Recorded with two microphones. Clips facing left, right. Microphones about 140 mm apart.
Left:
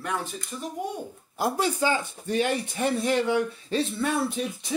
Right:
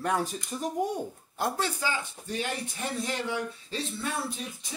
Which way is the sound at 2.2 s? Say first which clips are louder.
Left 9 dB; 65° left (ahead or behind).